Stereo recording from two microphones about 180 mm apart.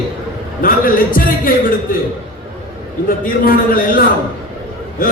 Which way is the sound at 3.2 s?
50° left (ahead or behind).